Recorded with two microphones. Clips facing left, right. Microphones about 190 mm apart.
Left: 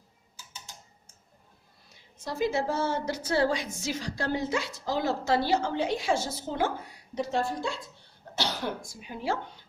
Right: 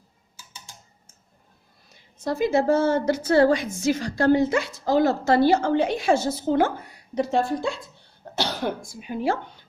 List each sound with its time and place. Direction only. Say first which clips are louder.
2.2 s a woman's voice: right 7 dB; 55° right (ahead or behind)
9.0 s a woman's voice: right 7 dB; 60° right (ahead or behind)